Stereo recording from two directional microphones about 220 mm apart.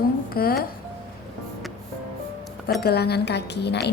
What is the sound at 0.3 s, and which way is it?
Speech, 45° left (ahead or behind).